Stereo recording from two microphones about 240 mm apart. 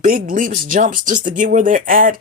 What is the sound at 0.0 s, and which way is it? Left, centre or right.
Speech, right.